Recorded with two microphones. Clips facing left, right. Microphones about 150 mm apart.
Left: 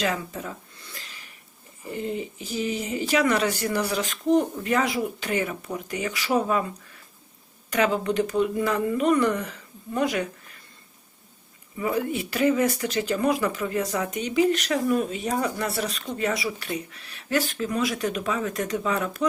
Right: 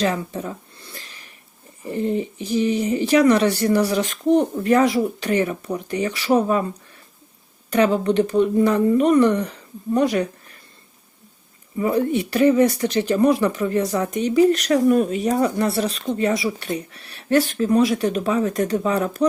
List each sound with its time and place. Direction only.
0.0 s a sound: 35° right (ahead or behind)
1.9 s speech: 35° right (ahead or behind)
7.7 s speech: 35° right (ahead or behind)
11.8 s speech: 40° right (ahead or behind)